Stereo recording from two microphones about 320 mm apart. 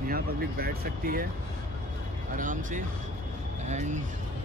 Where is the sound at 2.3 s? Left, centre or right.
Right.